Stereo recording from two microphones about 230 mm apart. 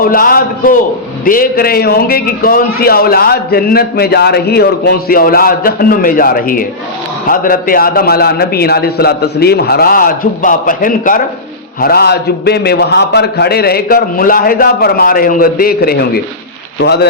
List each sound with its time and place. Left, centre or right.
0.0 s a man's voice: left